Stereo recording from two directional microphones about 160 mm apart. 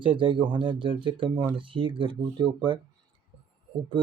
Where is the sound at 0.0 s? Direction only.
30° right (ahead or behind).